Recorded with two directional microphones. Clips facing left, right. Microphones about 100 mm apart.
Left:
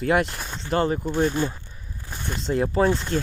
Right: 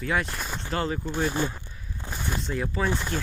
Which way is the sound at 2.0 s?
25° right (ahead or behind).